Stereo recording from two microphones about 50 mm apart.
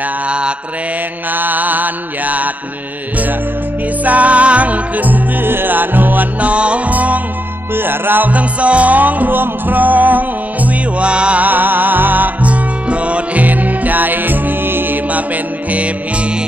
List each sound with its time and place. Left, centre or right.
1.3 s mantra: right
4.0 s music: right
6.5 s music: right
7.7 s music: right
8.3 s music: right
11.4 s music: right